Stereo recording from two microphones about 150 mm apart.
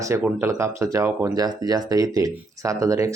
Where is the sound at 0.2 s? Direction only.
15° right (ahead or behind).